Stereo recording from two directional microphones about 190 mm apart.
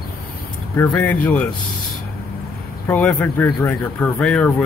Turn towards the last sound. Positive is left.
turn(degrees=5)  # may be behind; listen again after turning